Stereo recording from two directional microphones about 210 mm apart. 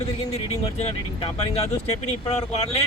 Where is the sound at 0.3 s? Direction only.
30° left (ahead or behind).